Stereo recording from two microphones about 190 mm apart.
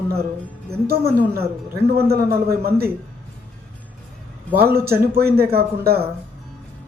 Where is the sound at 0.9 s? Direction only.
55° right (ahead or behind).